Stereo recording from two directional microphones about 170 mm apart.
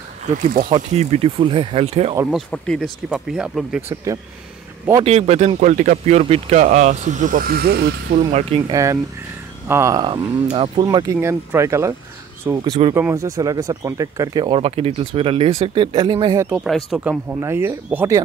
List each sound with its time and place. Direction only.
0.4 s speech: 55° right (ahead or behind)
0.7 s speech: 40° right (ahead or behind)
2.3 s speech: 5° left (ahead or behind)
3.9 s speech: 20° right (ahead or behind)
5.0 s speech: 40° right (ahead or behind); by 8.2 s 65° right (ahead or behind)
8.3 s speech: 40° right (ahead or behind)
8.6 s speech: 20° right (ahead or behind)
10.5 s speech: 30° right (ahead or behind)
12.6 s speech: 35° right (ahead or behind)
12.9 s speech: 15° right (ahead or behind)
16.3 s speech: 10° right (ahead or behind)